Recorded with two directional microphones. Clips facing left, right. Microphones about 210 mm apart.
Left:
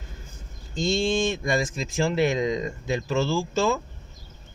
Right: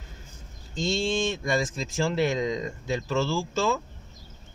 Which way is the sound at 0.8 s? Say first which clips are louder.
Left 3 dB; 15° left (ahead or behind).